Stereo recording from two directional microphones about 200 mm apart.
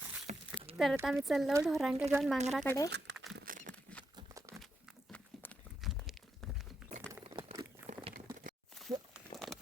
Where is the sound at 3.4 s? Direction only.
45° right (ahead or behind).